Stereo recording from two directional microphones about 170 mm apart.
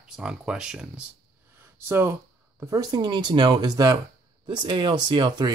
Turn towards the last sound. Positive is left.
turn(degrees=-25)  # may be behind; listen again after turning